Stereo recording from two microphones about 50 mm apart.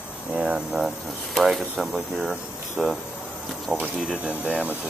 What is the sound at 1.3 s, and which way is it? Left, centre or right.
Speech, centre.